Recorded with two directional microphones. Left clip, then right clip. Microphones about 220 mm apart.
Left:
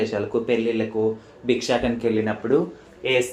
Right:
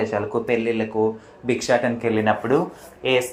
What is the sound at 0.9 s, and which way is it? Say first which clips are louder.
A man's voice: right 1 dB; 25° right (ahead or behind).